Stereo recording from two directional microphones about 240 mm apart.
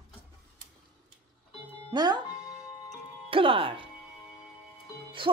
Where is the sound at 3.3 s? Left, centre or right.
Right.